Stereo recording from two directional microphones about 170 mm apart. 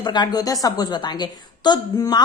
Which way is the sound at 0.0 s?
25° left (ahead or behind).